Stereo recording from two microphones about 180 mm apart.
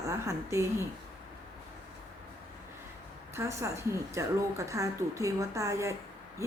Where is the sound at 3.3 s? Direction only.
15° right (ahead or behind).